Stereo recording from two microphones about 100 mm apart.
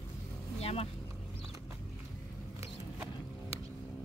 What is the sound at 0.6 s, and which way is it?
Vehicle, 90° left.